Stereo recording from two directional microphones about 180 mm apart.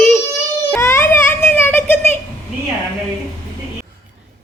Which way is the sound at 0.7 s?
15° left (ahead or behind).